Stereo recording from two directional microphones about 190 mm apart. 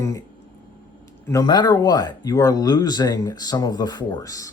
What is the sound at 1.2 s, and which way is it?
Speech, 15° left (ahead or behind).